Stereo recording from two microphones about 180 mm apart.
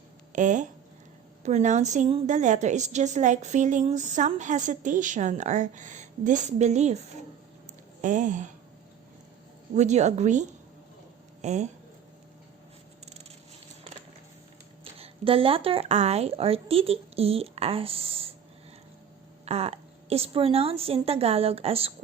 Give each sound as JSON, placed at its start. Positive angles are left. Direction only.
{"t": 0.3, "sound": "a woman's voice", "side_deg": -45}
{"t": 8.0, "sound": "speech", "side_deg": -45}
{"t": 9.7, "sound": "a woman's voice", "side_deg": -40}
{"t": 11.4, "sound": "a woman's voice", "side_deg": -40}
{"t": 14.9, "sound": "a woman's voice", "side_deg": -30}
{"t": 19.5, "sound": "a woman's voice", "side_deg": -35}